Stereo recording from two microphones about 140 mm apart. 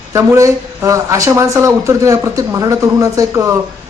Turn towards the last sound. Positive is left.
turn(degrees=-20)  # may be behind; listen again after turning